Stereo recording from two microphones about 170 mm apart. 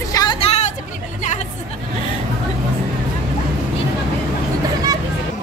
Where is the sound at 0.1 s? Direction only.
25° left (ahead or behind).